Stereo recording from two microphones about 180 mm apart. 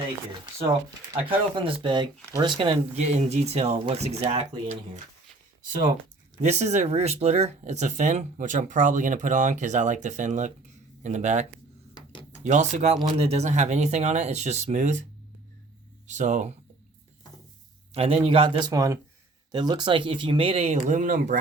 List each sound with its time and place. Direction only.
1.1 s speech: 30° right (ahead or behind)
6.4 s speech: 40° right (ahead or behind)
16.0 s speech: 40° right (ahead or behind)
17.9 s speech: 35° right (ahead or behind)